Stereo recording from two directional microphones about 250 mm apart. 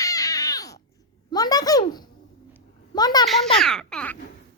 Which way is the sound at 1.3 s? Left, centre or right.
Centre.